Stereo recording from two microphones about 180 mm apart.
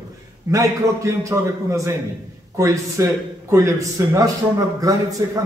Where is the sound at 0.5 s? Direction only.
15° right (ahead or behind).